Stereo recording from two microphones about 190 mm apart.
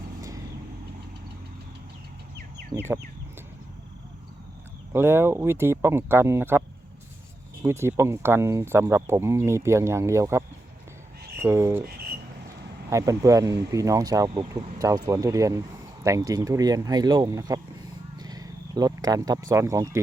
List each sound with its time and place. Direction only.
2.7 s speech: 10° right (ahead or behind)
4.9 s speech: 10° right (ahead or behind)
7.6 s speech: 15° right (ahead or behind)
12.9 s speech: 15° right (ahead or behind)
18.2 s wild animals: 20° right (ahead or behind)